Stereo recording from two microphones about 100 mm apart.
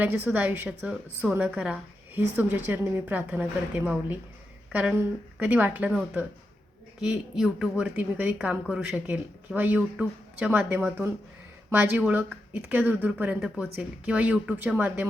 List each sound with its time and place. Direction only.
0.3 s a woman's voice: 15° right (ahead or behind)
5.9 s a woman's voice: 5° right (ahead or behind)